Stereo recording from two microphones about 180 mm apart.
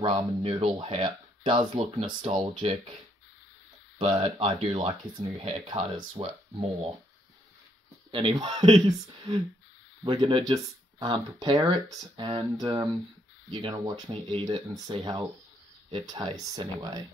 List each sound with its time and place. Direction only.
0.0 s speech: 30° right (ahead or behind)
4.0 s speech: 30° right (ahead or behind)
5.9 s speech: 25° right (ahead or behind)
8.1 s speech: 25° right (ahead or behind)